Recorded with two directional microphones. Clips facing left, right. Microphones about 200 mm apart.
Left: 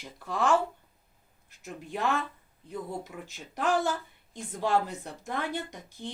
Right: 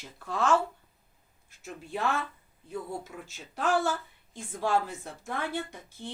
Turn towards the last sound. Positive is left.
turn(degrees=15)  # may be behind; listen again after turning